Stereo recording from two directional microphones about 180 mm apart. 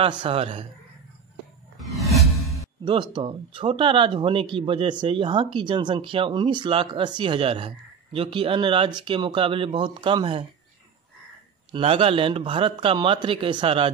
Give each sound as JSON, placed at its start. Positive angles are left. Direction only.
{"t": 0.2, "sound": "speech", "side_deg": -30}
{"t": 1.8, "sound": "whoosh", "side_deg": 0}
{"t": 2.8, "sound": "speech", "side_deg": -25}
{"t": 11.7, "sound": "speech", "side_deg": -30}